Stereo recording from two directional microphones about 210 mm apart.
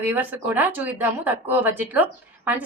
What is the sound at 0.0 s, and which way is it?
A woman's voice, 10° right (ahead or behind).